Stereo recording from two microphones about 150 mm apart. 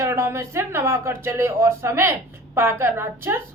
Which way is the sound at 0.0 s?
20° right (ahead or behind).